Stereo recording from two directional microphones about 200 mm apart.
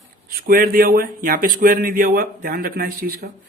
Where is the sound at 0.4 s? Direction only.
45° right (ahead or behind).